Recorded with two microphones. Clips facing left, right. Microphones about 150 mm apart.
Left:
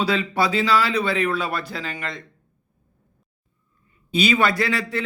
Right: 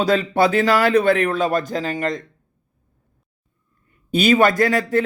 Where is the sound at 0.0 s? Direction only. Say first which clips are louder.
Right 5 dB; 45° right (ahead or behind).